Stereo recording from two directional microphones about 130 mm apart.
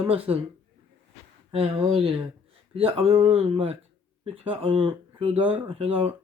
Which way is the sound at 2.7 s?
45° right (ahead or behind).